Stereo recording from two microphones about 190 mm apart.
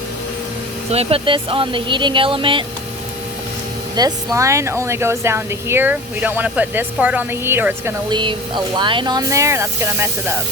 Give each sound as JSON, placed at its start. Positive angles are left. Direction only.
{"t": 0.9, "sound": "speech", "side_deg": -30}
{"t": 3.9, "sound": "speech", "side_deg": -20}
{"t": 8.1, "sound": "speech", "side_deg": -25}